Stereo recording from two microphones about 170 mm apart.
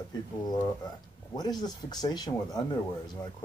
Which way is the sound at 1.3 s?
25° left (ahead or behind).